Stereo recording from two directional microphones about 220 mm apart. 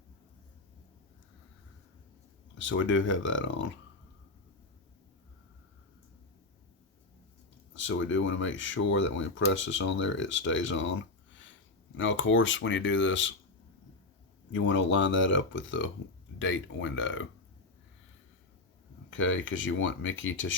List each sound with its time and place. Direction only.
2.6 s speech: 60° left (ahead or behind)
7.7 s speech: 60° left (ahead or behind)
11.9 s speech: 60° left (ahead or behind)
14.5 s speech: 60° left (ahead or behind)
19.1 s speech: 60° left (ahead or behind)